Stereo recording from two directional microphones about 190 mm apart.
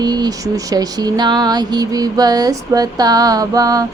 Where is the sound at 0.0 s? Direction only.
20° right (ahead or behind).